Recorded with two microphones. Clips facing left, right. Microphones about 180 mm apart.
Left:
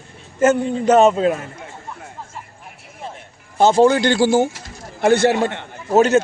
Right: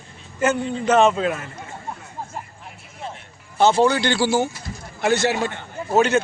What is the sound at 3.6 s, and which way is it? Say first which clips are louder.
A man's voice: left 4 dB; 45° left (ahead or behind).